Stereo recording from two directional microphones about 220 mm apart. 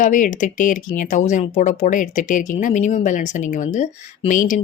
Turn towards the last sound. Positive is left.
turn(degrees=35)  # may be behind; listen again after turning